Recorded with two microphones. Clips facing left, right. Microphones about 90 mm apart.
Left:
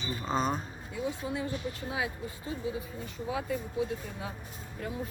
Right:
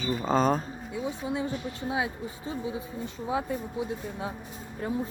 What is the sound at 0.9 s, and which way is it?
Speech, 25° right (ahead or behind).